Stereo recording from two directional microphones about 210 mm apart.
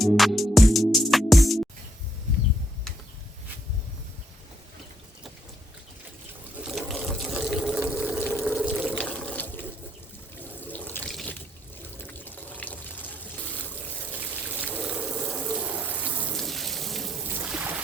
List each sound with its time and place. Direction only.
0.0 s music: centre (ahead or behind)
6.7 s water: centre (ahead or behind)
10.7 s sink: 10° left (ahead or behind)
11.9 s water: 10° left (ahead or behind)
14.2 s water: 5° right (ahead or behind)
17.2 s a sound: 10° right (ahead or behind)